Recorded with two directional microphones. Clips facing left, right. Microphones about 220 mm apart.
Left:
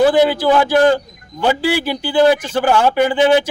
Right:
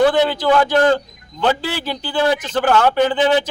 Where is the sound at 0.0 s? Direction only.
5° left (ahead or behind).